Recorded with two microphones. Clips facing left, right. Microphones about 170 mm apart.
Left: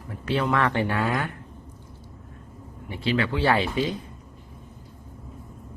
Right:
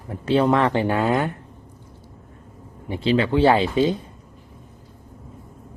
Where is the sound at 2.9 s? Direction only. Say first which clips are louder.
Right 6 dB; 25° right (ahead or behind).